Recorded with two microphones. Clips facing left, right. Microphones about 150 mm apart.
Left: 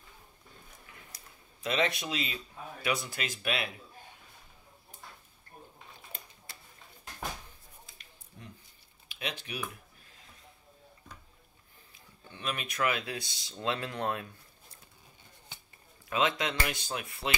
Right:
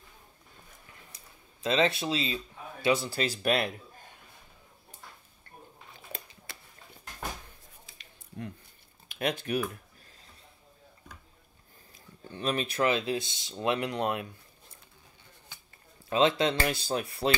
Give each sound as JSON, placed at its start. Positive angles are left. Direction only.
{"t": 1.6, "sound": "speech", "side_deg": -30}
{"t": 6.1, "sound": "a sound", "side_deg": -75}
{"t": 9.1, "sound": "speech", "side_deg": -50}
{"t": 12.3, "sound": "speech", "side_deg": -35}
{"t": 16.1, "sound": "speech", "side_deg": -30}